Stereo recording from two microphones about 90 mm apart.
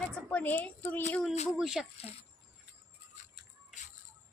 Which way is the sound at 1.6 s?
5° right (ahead or behind).